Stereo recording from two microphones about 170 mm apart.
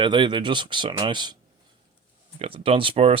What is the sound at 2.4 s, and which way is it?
Speech, 35° right (ahead or behind).